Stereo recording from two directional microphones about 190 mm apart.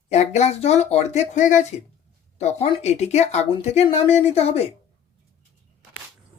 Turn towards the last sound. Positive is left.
turn(degrees=30)  # may be behind; listen again after turning